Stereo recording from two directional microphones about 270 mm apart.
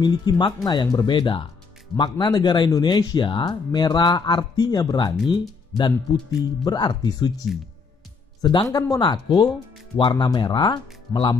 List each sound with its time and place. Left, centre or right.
0.0 s speech: centre
8.4 s speech: centre